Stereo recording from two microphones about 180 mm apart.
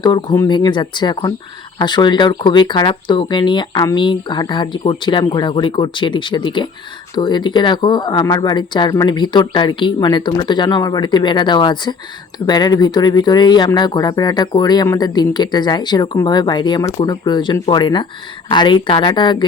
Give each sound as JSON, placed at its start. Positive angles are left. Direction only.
{"t": 0.0, "sound": "speech", "side_deg": 25}